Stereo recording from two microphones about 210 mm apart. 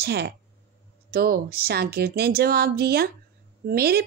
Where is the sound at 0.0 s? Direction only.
50° right (ahead or behind).